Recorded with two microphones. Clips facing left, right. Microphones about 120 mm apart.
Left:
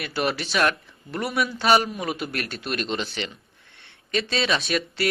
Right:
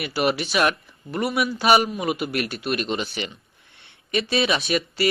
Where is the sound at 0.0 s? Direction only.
5° right (ahead or behind).